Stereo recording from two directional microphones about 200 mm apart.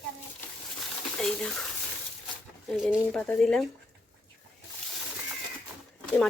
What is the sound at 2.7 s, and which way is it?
Speech, centre (ahead or behind).